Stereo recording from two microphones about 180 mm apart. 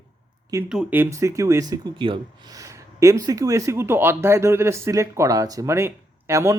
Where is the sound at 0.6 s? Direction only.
5° right (ahead or behind).